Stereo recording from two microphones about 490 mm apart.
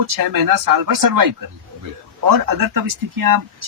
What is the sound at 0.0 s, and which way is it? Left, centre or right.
Speech, right.